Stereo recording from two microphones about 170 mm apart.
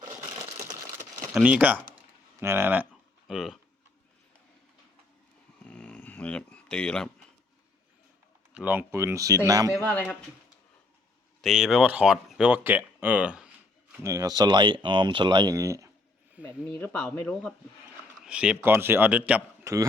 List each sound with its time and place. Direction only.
1.3 s speech: 5° right (ahead or behind)
3.2 s speech: centre (ahead or behind)
5.6 s a sound: 5° left (ahead or behind)
8.5 s speech: 10° right (ahead or behind)
9.7 s speech: 10° left (ahead or behind)
11.4 s speech: centre (ahead or behind)
14.0 s speech: 20° right (ahead or behind)
16.4 s speech: 10° left (ahead or behind)
18.2 s speech: 5° right (ahead or behind)